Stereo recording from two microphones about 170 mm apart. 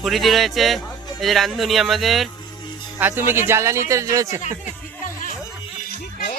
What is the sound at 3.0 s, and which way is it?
Speech, 15° right (ahead or behind).